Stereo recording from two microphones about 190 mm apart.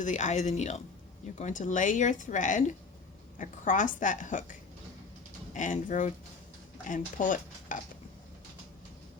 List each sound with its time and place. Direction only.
0.0 s a woman's voice: 40° left (ahead or behind)
5.5 s a woman's voice: 40° left (ahead or behind)